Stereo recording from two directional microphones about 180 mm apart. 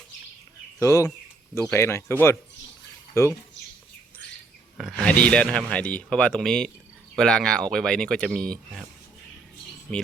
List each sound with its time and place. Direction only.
0.8 s speech: 20° left (ahead or behind)
4.8 s speech: centre (ahead or behind)